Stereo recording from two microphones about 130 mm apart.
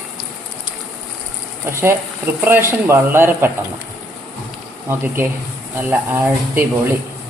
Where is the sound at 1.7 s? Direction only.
20° right (ahead or behind).